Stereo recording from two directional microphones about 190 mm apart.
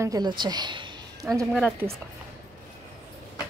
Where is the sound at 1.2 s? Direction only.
15° right (ahead or behind).